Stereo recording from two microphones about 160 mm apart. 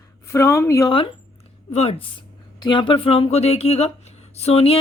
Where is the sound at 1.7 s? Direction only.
40° left (ahead or behind).